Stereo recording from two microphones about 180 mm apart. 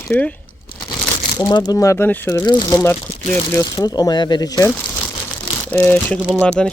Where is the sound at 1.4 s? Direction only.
25° left (ahead or behind).